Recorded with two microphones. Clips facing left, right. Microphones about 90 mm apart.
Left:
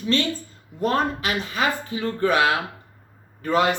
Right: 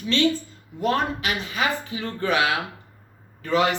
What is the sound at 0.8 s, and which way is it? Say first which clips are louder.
A man's voice: left 1 dB; 40° left (ahead or behind).